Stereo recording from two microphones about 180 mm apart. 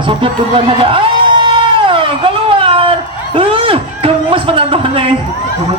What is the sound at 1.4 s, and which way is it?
Cat, 25° right (ahead or behind).